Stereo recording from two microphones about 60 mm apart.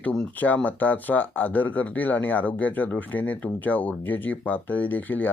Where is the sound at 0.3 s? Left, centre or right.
Left.